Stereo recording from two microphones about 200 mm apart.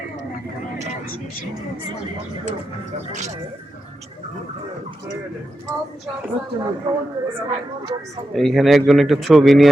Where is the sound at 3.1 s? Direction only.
35° right (ahead or behind).